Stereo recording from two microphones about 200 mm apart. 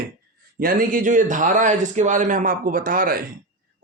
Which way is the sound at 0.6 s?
45° right (ahead or behind).